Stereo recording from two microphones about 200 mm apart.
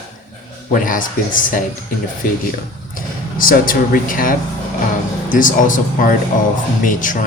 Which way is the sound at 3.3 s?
45° left (ahead or behind).